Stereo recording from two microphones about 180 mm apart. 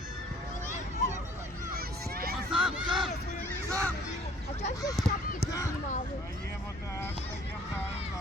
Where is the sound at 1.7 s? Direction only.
55° right (ahead or behind).